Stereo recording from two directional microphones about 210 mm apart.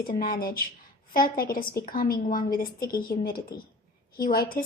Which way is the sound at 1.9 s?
45° left (ahead or behind).